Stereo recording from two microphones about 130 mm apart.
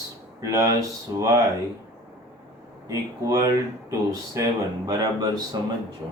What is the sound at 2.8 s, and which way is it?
Speech, 25° right (ahead or behind).